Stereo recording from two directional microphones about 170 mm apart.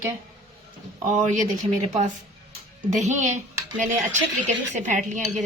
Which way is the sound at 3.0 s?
45° right (ahead or behind).